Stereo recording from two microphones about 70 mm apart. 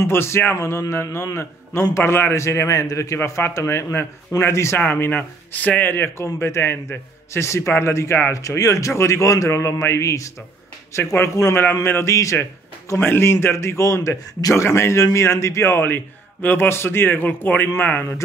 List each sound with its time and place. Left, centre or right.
0.0 s a man's voice: left
4.7 s speech: left
8.3 s a man's voice: left
13.0 s a man's voice: left